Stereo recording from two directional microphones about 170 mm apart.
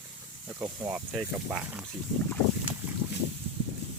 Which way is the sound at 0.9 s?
5° right (ahead or behind).